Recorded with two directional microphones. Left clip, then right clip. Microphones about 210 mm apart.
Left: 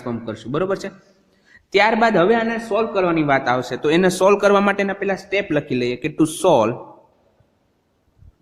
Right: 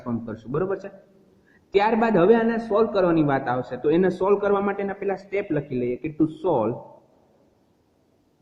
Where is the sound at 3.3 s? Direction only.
30° left (ahead or behind).